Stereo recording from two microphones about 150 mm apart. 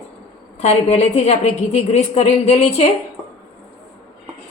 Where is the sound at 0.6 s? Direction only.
45° left (ahead or behind).